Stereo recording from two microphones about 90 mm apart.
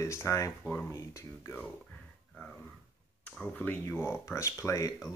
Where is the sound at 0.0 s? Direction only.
35° left (ahead or behind).